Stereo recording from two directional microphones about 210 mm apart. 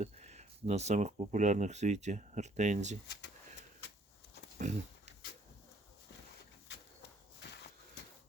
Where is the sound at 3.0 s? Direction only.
55° left (ahead or behind).